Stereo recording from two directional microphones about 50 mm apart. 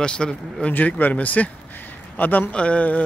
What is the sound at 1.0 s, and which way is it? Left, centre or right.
Speech, left.